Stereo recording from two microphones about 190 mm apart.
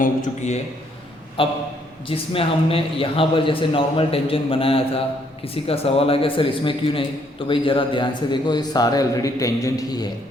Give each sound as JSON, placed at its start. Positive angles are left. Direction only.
{"t": 0.0, "sound": "a man's voice", "side_deg": 40}
{"t": 1.4, "sound": "a man's voice", "side_deg": 30}